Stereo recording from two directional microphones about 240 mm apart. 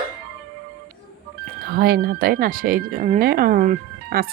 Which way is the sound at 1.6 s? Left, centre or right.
Right.